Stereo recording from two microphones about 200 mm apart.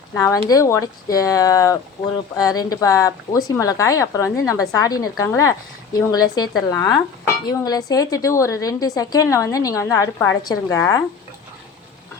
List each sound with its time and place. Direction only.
0.1 s speech: 15° left (ahead or behind)